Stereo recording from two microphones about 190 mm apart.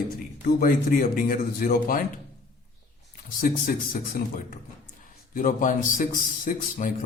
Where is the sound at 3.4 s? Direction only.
50° left (ahead or behind).